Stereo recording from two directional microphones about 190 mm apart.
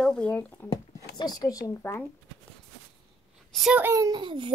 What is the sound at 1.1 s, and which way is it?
Speech, 20° left (ahead or behind).